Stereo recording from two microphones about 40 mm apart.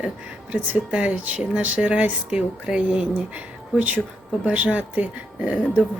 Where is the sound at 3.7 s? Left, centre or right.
Right.